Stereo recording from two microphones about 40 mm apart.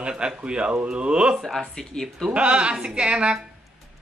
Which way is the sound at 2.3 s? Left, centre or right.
Right.